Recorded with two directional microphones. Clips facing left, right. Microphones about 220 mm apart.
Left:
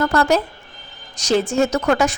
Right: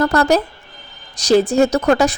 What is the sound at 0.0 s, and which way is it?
A woman's voice, 40° right (ahead or behind).